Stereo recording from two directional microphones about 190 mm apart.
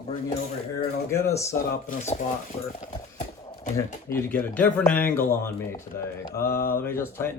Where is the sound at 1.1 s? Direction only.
15° left (ahead or behind).